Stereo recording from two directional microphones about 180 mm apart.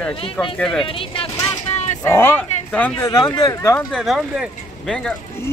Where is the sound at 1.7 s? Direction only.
40° left (ahead or behind).